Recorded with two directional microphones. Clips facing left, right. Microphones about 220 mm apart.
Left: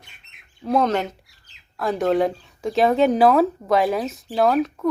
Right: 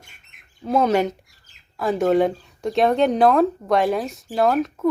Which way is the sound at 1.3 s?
50° right (ahead or behind).